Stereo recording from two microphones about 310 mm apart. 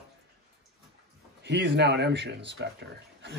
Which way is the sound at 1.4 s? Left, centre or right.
Right.